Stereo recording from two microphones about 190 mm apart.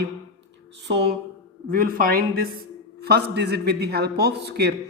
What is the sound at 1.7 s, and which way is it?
Speech, 50° right (ahead or behind).